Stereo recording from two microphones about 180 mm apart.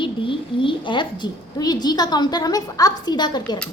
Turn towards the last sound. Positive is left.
turn(degrees=25)  # may be behind; listen again after turning